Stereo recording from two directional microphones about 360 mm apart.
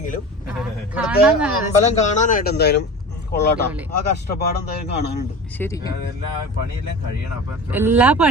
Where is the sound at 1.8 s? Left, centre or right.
Centre.